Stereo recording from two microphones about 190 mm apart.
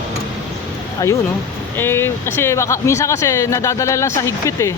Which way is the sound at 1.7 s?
10° left (ahead or behind).